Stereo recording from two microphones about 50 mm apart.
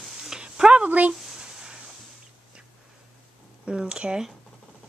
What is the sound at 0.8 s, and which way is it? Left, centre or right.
Speech, right.